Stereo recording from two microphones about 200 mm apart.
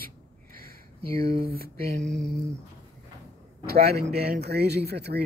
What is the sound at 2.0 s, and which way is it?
Speech, 5° left (ahead or behind).